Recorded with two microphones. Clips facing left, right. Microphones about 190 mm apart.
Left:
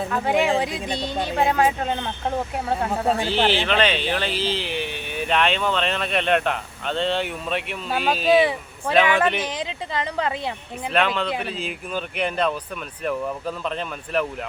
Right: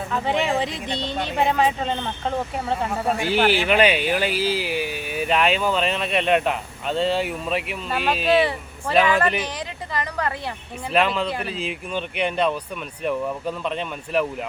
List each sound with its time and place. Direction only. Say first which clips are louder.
0.1 s speech: right 3 dB; centre (ahead or behind)
0.3 s speech: left 4 dB; 10° left (ahead or behind)
3.2 s a man's voice: right 1 dB; 10° right (ahead or behind)
9.5 s speech: left 2 dB; 20° left (ahead or behind)
10.9 s speech: right 1 dB; centre (ahead or behind)